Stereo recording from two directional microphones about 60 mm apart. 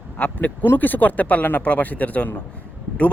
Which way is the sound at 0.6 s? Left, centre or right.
Left.